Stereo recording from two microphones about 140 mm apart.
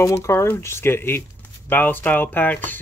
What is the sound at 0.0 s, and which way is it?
Speech, 20° left (ahead or behind).